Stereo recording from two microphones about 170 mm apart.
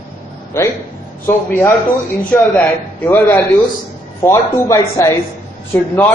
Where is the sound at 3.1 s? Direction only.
10° left (ahead or behind).